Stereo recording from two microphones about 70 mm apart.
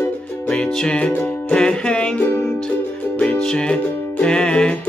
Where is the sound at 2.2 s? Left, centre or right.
Left.